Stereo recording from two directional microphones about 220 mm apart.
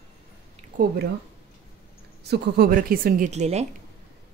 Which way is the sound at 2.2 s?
45° right (ahead or behind).